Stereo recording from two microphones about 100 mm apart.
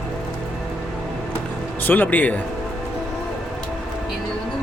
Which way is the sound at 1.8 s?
15° left (ahead or behind).